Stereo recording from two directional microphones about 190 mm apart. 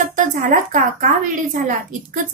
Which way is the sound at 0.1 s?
45° right (ahead or behind).